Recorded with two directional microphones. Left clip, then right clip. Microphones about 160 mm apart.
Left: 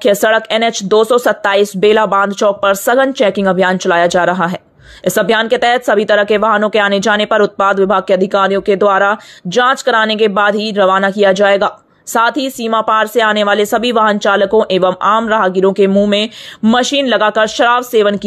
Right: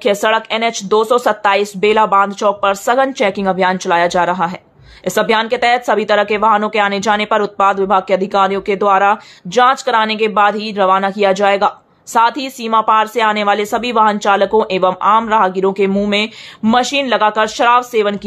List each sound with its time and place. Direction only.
0.0 s speech: 25° left (ahead or behind)